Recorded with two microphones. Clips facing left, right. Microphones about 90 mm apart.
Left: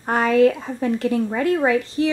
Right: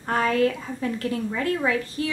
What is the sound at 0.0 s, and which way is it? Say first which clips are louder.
A woman's voice: left 6 dB; 25° left (ahead or behind).